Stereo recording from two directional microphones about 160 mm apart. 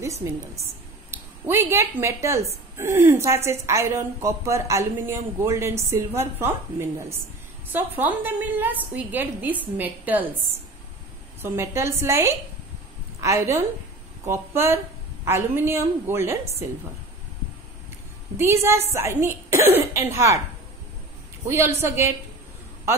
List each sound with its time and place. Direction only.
0.0 s a woman's voice: 20° right (ahead or behind)
11.4 s a woman's voice: 15° right (ahead or behind)
18.4 s a woman's voice: 15° right (ahead or behind)
21.5 s a woman's voice: 15° right (ahead or behind)